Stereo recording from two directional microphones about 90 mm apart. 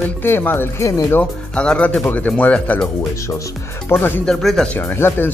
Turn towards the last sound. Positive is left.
turn(degrees=25)  # may be behind; listen again after turning